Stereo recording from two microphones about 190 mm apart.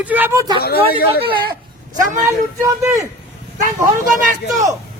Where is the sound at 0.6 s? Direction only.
55° left (ahead or behind).